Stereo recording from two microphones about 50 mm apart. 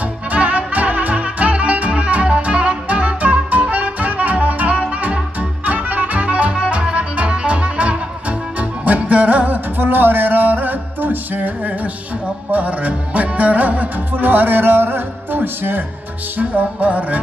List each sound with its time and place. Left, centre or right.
0.3 s music: right
16.3 s music: right